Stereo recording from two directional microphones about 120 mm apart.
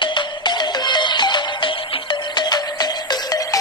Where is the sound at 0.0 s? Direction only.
40° left (ahead or behind).